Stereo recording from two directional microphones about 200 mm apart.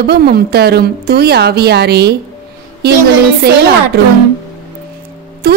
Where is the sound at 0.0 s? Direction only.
50° right (ahead or behind).